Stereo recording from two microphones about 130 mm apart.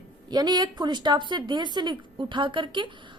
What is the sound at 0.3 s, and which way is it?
A woman's voice, 35° right (ahead or behind).